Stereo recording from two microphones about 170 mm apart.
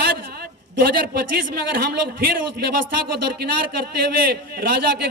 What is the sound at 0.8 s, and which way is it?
A man's voice, 60° right (ahead or behind).